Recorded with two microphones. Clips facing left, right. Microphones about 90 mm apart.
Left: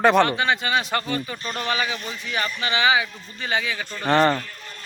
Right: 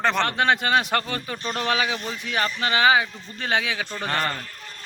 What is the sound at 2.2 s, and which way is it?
Speech, 50° right (ahead or behind).